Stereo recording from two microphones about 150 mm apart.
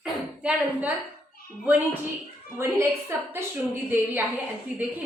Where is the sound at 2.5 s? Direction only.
15° right (ahead or behind).